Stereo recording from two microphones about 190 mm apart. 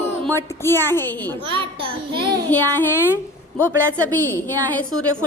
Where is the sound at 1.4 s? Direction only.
30° right (ahead or behind).